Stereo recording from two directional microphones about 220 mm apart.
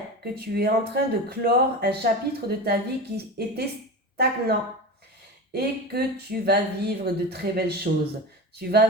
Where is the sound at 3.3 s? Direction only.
45° right (ahead or behind).